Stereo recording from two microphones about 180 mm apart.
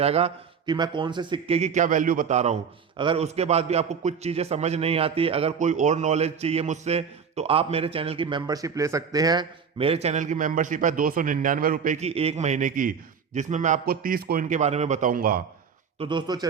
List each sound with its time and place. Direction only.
0.0 s a man's voice: 35° right (ahead or behind); by 15.4 s 50° right (ahead or behind)
16.0 s speech: 25° right (ahead or behind)